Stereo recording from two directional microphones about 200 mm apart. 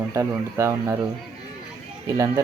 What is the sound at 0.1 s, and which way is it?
Speech, 15° right (ahead or behind).